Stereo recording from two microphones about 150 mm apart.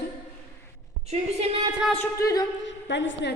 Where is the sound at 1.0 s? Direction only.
45° right (ahead or behind).